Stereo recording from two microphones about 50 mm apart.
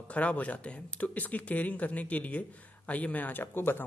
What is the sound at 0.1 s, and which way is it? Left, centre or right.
Speech, left.